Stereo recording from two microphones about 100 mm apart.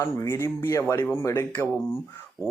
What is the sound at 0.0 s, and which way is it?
Speech, 30° left (ahead or behind).